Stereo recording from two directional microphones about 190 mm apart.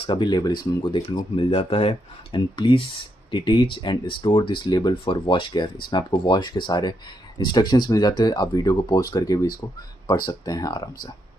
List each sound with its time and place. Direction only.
0.0 s speech: 25° left (ahead or behind)